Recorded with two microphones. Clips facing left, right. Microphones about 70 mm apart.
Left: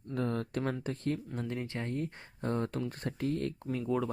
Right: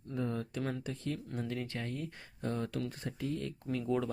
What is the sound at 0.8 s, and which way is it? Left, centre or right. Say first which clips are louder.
Speech: left 4 dB; left.